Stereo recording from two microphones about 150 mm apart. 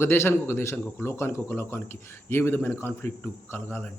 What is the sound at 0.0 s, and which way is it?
Speech, 15° left (ahead or behind).